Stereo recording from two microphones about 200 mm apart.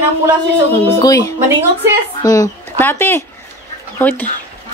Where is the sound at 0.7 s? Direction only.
15° left (ahead or behind).